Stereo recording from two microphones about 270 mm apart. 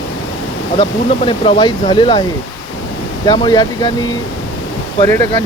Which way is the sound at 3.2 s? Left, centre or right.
Centre.